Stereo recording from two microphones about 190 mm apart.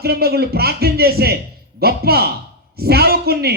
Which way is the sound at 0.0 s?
55° right (ahead or behind).